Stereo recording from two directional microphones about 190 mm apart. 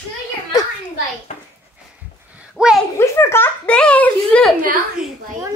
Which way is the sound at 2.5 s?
5° right (ahead or behind).